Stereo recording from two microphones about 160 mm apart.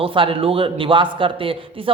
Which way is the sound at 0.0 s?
35° right (ahead or behind).